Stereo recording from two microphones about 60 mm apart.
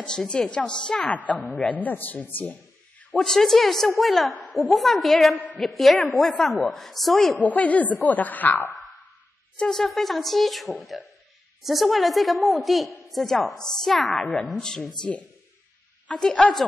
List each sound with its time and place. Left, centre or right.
0.0 s a woman's voice: centre; by 2.5 s left
3.2 s a woman's voice: centre
7.3 s a woman's voice: left
9.7 s a woman's voice: centre